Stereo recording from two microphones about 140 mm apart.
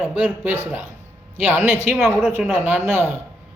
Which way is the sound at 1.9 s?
Centre (ahead or behind).